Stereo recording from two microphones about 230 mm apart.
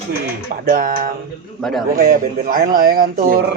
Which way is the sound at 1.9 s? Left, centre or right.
Right.